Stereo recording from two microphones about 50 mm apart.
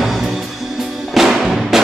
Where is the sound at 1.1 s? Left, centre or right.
Centre.